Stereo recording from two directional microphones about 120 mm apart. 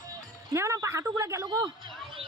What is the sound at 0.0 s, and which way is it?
Music, 25° right (ahead or behind).